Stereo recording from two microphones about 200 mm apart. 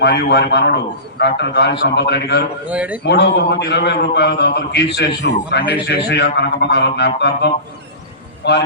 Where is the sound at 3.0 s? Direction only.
55° left (ahead or behind).